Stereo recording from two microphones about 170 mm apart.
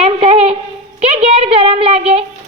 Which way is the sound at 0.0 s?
35° right (ahead or behind).